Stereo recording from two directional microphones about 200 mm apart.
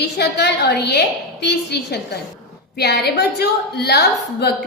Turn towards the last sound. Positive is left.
turn(degrees=55)  # may be behind; listen again after turning